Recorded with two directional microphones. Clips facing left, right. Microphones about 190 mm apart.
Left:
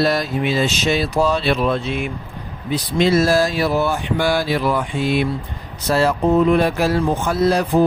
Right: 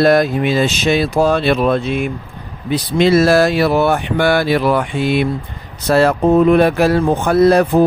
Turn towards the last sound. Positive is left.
turn(degrees=-60)  # may be behind; listen again after turning